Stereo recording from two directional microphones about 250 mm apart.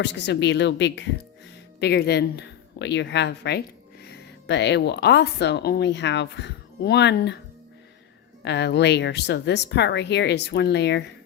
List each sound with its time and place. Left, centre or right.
0.0 s speech: left
8.4 s speech: left